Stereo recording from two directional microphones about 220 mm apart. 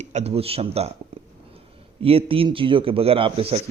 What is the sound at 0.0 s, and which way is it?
Speech, 30° right (ahead or behind).